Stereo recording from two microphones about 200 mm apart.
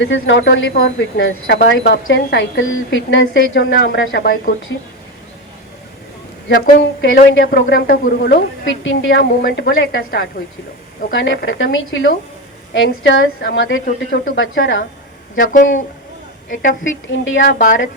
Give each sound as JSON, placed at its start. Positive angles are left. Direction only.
{"t": 0.0, "sound": "a woman's voice", "side_deg": 65}
{"t": 1.7, "sound": "a woman's voice", "side_deg": 60}
{"t": 6.5, "sound": "a woman's voice", "side_deg": 60}
{"t": 8.6, "sound": "a woman's voice", "side_deg": 70}
{"t": 9.4, "sound": "a woman's voice", "side_deg": 55}
{"t": 15.5, "sound": "speech", "side_deg": 40}
{"t": 17.1, "sound": "a woman's voice", "side_deg": 65}
{"t": 17.4, "sound": "a woman's voice", "side_deg": 45}